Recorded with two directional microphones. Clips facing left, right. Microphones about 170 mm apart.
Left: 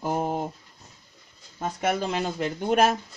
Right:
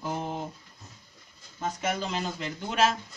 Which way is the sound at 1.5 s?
55° left (ahead or behind).